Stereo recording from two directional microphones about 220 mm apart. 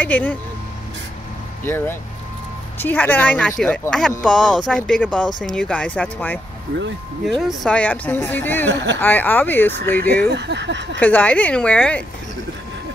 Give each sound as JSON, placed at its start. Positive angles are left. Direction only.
{"t": 0.0, "sound": "speech", "side_deg": 10}
{"t": 1.6, "sound": "speech", "side_deg": 10}
{"t": 8.6, "sound": "speech", "side_deg": -55}
{"t": 9.0, "sound": "speech", "side_deg": 10}
{"t": 10.2, "sound": "speech", "side_deg": -50}
{"t": 11.0, "sound": "speech", "side_deg": 5}